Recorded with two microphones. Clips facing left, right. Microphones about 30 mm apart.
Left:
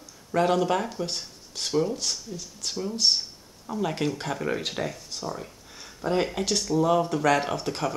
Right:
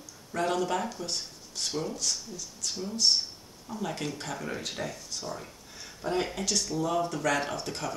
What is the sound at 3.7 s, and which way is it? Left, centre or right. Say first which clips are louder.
Speech: left 6 dB; left.